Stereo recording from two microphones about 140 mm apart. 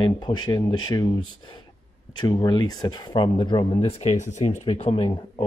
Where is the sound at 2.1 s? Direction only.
30° left (ahead or behind).